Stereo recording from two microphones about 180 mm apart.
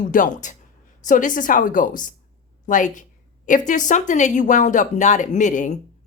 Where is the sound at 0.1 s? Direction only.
45° left (ahead or behind).